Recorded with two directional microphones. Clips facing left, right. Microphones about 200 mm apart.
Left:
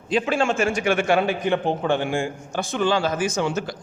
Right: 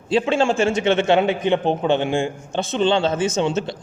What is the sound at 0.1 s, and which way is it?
A man's voice, 25° right (ahead or behind).